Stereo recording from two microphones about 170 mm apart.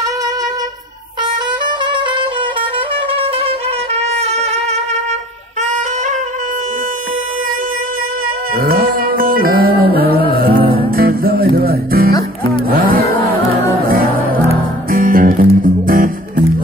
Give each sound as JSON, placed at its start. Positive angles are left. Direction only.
{"t": 3.1, "sound": "music", "side_deg": -35}
{"t": 8.5, "sound": "music", "side_deg": -60}